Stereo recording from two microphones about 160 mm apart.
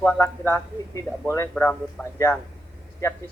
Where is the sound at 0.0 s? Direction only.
10° left (ahead or behind).